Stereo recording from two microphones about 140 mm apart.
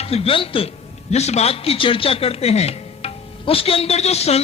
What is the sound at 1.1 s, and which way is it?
A man's voice, 50° left (ahead or behind).